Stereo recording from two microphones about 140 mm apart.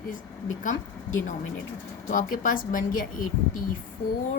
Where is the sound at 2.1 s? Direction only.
70° left (ahead or behind).